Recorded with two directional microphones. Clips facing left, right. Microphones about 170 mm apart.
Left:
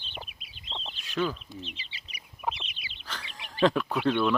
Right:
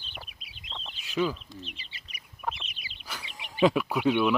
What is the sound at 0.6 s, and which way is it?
Chicken, 75° right (ahead or behind).